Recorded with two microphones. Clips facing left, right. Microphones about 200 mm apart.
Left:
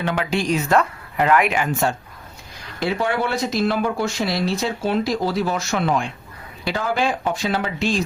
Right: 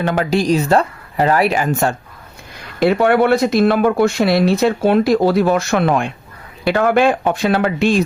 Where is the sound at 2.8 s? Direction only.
60° right (ahead or behind).